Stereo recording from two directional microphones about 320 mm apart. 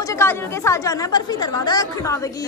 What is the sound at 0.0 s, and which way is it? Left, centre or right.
A woman's voice, centre.